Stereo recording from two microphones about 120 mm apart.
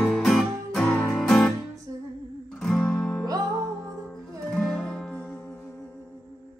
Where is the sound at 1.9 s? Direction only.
25° right (ahead or behind).